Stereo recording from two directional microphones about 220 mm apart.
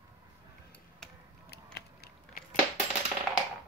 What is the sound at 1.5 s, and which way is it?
Typing, 45° left (ahead or behind).